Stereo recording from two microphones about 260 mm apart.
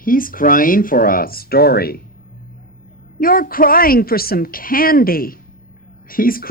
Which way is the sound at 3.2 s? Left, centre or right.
Left.